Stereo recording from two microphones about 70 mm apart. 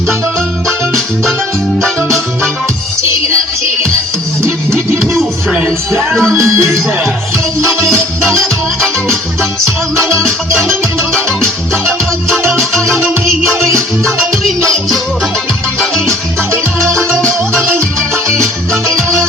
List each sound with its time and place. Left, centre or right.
5.5 s music: centre
6.3 s speech: right
7.9 s music: right
8.8 s music: centre
9.6 s music: right
10.7 s music: centre
16.8 s music: centre
17.6 s music: right
18.7 s music: centre